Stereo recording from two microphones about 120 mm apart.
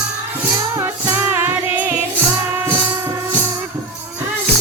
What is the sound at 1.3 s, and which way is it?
Music, 15° right (ahead or behind).